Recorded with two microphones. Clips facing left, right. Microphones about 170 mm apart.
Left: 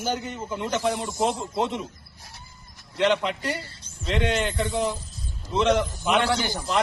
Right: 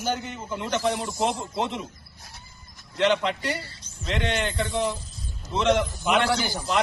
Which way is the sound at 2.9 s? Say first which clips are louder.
Even; centre (ahead or behind).